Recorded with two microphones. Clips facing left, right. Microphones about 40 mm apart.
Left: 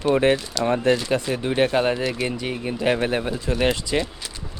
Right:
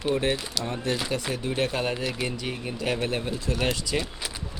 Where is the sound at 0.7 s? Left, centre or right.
Left.